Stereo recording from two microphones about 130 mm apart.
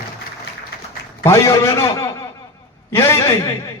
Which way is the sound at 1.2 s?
20° left (ahead or behind).